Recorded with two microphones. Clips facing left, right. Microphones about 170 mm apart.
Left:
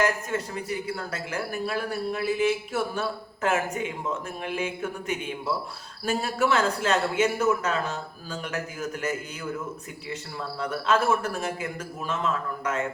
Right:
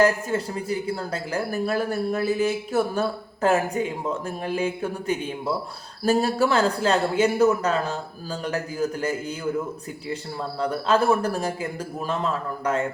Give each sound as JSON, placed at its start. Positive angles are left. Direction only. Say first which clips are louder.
{"t": 0.0, "sound": "speech", "louder": "right 5 dB", "side_deg": -30}
{"t": 10.6, "sound": "speech", "louder": "right 3 dB", "side_deg": -35}